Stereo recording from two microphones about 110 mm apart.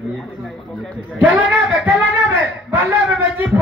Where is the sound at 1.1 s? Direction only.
15° right (ahead or behind).